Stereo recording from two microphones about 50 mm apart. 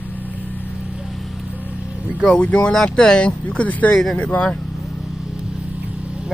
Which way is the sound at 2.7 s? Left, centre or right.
Centre.